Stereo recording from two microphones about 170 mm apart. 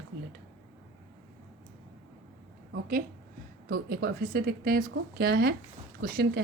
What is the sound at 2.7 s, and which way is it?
A woman's voice, 60° right (ahead or behind).